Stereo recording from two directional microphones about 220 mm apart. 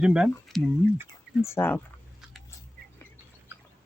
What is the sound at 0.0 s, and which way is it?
Speech, 5° right (ahead or behind).